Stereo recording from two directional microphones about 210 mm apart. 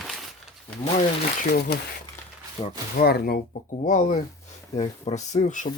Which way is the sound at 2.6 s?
25° left (ahead or behind).